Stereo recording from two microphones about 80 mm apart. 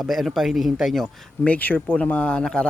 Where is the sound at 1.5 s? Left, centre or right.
Left.